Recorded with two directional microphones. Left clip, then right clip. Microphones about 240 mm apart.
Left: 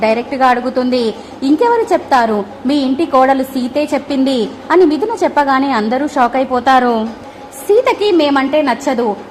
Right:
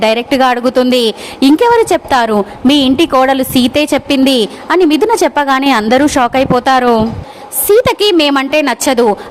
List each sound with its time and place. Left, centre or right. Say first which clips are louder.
0.0 s a woman's voice: right 2 dB; right